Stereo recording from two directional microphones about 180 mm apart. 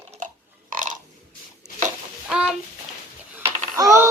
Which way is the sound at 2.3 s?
5° right (ahead or behind).